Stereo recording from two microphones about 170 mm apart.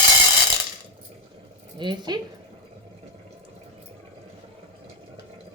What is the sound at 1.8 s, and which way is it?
Speech, 25° right (ahead or behind).